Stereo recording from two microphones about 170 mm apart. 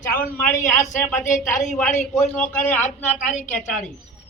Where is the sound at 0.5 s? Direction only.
45° left (ahead or behind).